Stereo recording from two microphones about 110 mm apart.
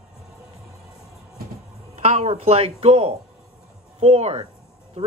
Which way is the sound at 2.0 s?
70° right (ahead or behind).